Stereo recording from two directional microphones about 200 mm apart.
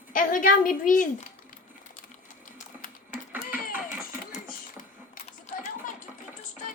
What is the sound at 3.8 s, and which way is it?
Music, 40° left (ahead or behind).